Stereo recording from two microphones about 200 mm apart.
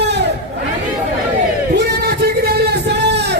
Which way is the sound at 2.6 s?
55° right (ahead or behind).